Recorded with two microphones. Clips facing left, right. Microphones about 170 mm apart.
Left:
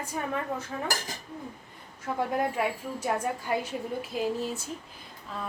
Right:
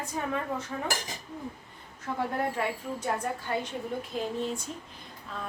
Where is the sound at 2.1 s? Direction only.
10° left (ahead or behind).